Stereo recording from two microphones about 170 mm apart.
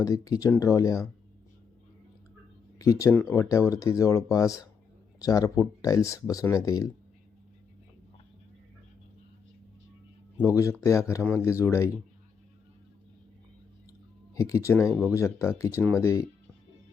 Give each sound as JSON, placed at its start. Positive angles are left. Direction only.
{"t": 0.0, "sound": "speech", "side_deg": 20}
{"t": 2.7, "sound": "speech", "side_deg": 20}
{"t": 10.4, "sound": "speech", "side_deg": 20}
{"t": 14.3, "sound": "speech", "side_deg": 20}